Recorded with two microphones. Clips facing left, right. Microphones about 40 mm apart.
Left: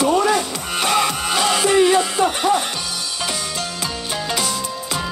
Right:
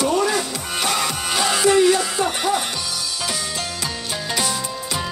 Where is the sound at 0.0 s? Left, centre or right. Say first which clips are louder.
Left 3 dB; left.